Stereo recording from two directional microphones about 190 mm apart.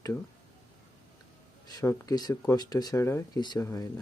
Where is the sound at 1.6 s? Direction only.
15° left (ahead or behind).